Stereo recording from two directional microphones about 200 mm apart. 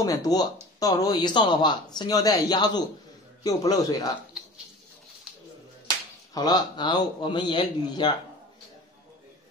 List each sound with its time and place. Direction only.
0.0 s speech: 15° left (ahead or behind)
6.3 s speech: 20° left (ahead or behind)